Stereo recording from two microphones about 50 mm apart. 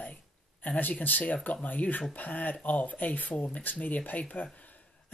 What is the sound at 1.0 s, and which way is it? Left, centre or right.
Speech, left.